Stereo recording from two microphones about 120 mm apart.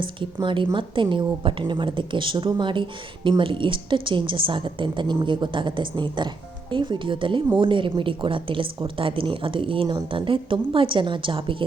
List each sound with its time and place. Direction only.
0.2 s speech: 45° right (ahead or behind)